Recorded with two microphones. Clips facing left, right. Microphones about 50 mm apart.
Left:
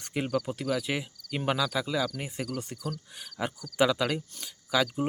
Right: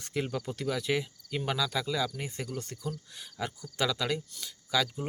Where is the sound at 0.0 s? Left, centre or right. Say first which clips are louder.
Left 3 dB; centre.